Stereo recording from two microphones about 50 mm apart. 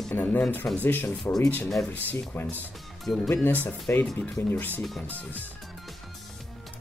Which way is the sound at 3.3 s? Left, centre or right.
Left.